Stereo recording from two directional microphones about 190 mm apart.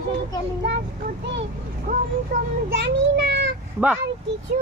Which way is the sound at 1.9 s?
45° right (ahead or behind).